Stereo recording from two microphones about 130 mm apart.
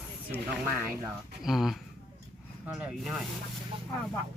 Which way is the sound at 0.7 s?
20° right (ahead or behind).